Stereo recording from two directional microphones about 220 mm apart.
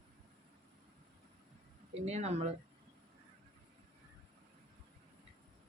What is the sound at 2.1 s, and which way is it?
Speech, 30° right (ahead or behind).